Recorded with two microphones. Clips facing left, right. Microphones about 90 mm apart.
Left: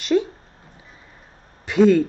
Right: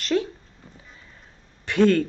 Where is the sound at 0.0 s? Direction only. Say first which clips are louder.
Left 4 dB; 10° left (ahead or behind).